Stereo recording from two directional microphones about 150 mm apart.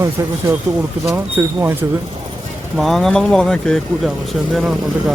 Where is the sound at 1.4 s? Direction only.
20° right (ahead or behind).